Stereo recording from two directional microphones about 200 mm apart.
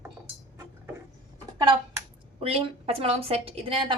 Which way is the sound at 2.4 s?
30° right (ahead or behind).